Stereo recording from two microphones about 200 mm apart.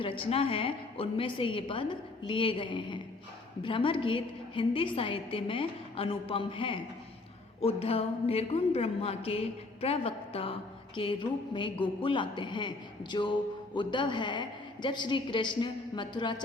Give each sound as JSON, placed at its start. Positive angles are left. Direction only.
{"t": 0.0, "sound": "a woman's voice", "side_deg": 25}